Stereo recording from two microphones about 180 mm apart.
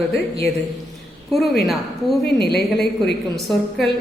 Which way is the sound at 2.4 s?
65° left (ahead or behind).